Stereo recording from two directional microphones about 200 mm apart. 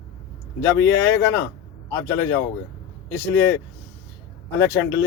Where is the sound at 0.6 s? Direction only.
15° left (ahead or behind).